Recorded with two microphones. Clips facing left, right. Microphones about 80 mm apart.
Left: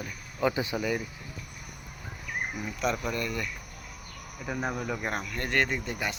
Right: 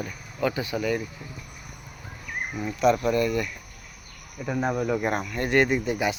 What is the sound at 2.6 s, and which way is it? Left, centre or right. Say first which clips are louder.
Speech: right 10 dB; centre.